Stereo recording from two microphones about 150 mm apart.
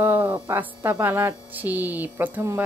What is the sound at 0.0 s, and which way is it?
Speech, 15° right (ahead or behind).